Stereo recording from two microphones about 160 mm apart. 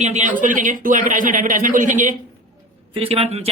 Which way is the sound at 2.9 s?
35° right (ahead or behind).